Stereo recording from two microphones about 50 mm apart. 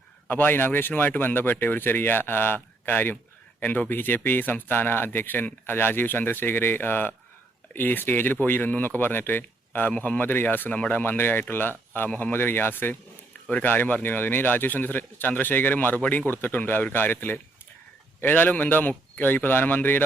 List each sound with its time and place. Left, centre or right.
0.3 s speech: left